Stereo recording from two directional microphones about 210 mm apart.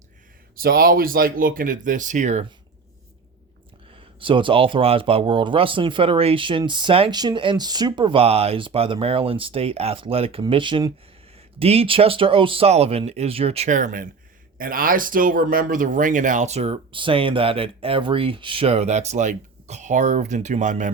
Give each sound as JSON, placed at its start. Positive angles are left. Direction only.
{"t": 0.5, "sound": "speech", "side_deg": -45}
{"t": 4.2, "sound": "speech", "side_deg": -25}